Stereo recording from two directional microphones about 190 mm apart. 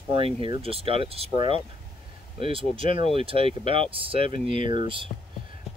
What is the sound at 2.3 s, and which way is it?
Speech, 30° right (ahead or behind).